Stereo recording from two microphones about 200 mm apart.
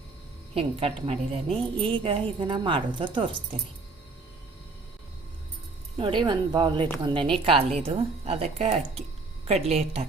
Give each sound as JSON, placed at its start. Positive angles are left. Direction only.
{"t": 0.5, "sound": "a woman's voice", "side_deg": -30}
{"t": 6.0, "sound": "a woman's voice", "side_deg": -25}